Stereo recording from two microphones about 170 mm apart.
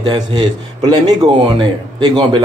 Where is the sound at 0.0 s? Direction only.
30° right (ahead or behind).